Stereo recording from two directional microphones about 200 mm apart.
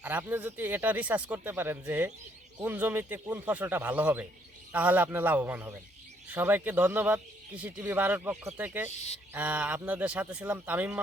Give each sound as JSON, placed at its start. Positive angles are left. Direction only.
{"t": 0.0, "sound": "speech", "side_deg": -10}
{"t": 8.9, "sound": "speech", "side_deg": 35}
{"t": 9.3, "sound": "speech", "side_deg": -10}